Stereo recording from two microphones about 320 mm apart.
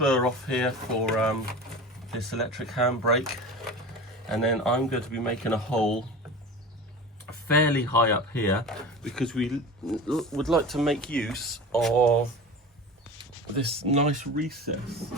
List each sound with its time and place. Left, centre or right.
0.0 s speech: centre
4.3 s speech: centre
7.4 s speech: centre
13.7 s speech: centre